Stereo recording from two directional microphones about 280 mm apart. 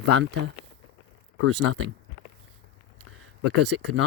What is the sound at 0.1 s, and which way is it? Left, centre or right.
Speech, right.